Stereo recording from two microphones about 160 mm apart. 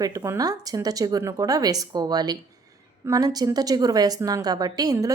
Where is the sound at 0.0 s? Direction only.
20° right (ahead or behind).